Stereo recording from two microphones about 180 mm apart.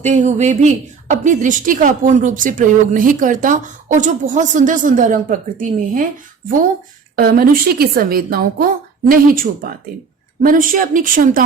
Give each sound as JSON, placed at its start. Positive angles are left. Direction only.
{"t": 0.0, "sound": "a woman's voice", "side_deg": -40}
{"t": 7.2, "sound": "a woman's voice", "side_deg": -55}